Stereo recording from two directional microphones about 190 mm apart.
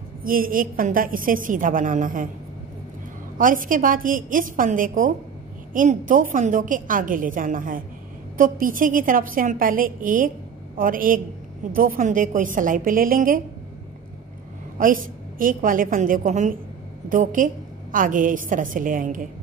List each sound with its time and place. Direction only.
0.2 s a woman's voice: 50° right (ahead or behind)
3.3 s a woman's voice: 45° right (ahead or behind)
14.8 s a woman's voice: 45° right (ahead or behind)